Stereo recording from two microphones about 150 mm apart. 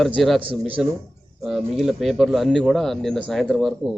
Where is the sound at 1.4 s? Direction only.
Centre (ahead or behind).